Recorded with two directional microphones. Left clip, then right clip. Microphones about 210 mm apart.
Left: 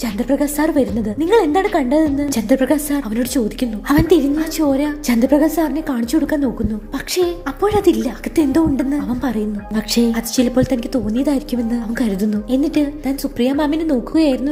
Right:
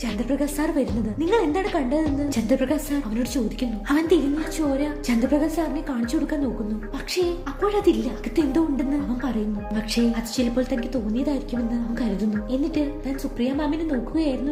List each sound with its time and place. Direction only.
0.0 s a woman's voice: 30° left (ahead or behind); by 14.3 s 45° left (ahead or behind)